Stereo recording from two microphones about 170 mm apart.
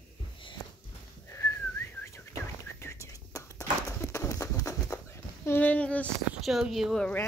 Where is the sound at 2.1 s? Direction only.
15° left (ahead or behind).